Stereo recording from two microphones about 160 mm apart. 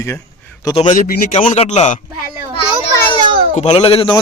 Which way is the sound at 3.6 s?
40° left (ahead or behind).